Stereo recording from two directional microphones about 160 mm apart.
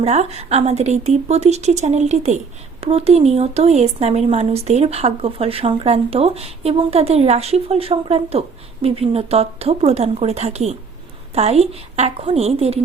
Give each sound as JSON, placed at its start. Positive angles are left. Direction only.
{"t": 0.0, "sound": "a woman's voice", "side_deg": -40}